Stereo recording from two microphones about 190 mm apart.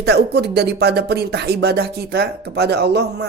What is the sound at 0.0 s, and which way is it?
Speech, 60° right (ahead or behind).